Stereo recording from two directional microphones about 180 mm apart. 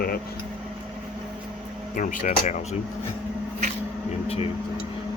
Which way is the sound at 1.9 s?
45° left (ahead or behind).